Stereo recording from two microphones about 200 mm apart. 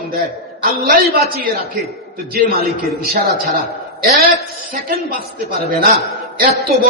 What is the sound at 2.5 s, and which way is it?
Speech, 50° right (ahead or behind).